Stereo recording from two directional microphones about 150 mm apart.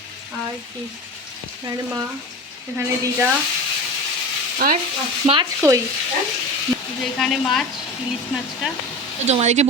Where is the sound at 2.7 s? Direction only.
15° right (ahead or behind).